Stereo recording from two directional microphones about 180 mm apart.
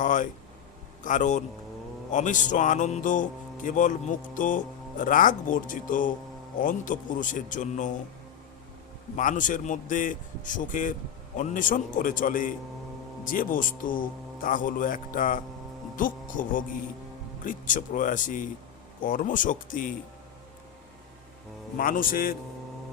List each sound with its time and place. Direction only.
0.0 s a man's voice: 45° left (ahead or behind)
9.1 s a man's voice: 45° left (ahead or behind)
21.8 s a man's voice: 50° left (ahead or behind)